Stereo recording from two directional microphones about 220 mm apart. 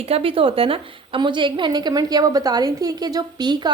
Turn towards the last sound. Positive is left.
turn(degrees=-20)  # may be behind; listen again after turning